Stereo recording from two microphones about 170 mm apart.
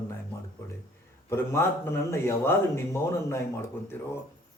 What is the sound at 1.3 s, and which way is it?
A man's voice, 15° left (ahead or behind).